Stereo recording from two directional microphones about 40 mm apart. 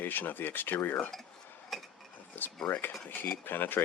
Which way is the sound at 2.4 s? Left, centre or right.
Left.